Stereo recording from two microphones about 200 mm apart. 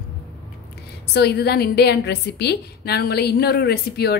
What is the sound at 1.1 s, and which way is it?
A woman's voice, 55° left (ahead or behind).